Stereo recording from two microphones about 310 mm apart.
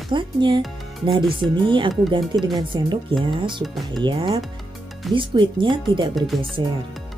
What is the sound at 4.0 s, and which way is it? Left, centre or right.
Speech, centre.